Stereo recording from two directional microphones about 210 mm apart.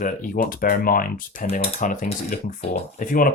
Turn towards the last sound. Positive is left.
turn(degrees=40)  # may be behind; listen again after turning